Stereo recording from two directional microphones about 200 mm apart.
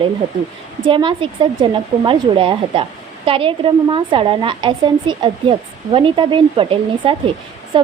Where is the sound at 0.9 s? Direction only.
25° right (ahead or behind).